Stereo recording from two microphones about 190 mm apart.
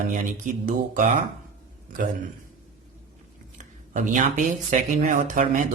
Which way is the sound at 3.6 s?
40° right (ahead or behind).